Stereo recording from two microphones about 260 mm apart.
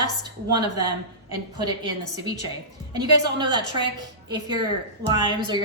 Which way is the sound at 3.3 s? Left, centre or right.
Centre.